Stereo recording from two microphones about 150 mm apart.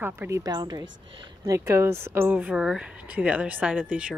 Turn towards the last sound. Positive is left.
turn(degrees=-10)  # may be behind; listen again after turning